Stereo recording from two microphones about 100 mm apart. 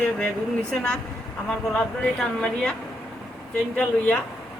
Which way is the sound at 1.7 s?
10° left (ahead or behind).